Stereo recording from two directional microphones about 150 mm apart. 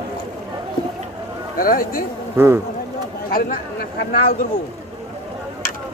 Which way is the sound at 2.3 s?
15° right (ahead or behind).